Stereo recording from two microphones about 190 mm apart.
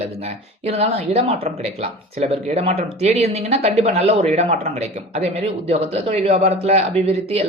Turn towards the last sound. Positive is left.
turn(degrees=-30)  # may be behind; listen again after turning